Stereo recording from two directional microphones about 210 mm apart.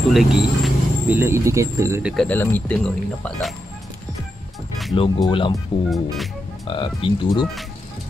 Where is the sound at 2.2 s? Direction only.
10° left (ahead or behind).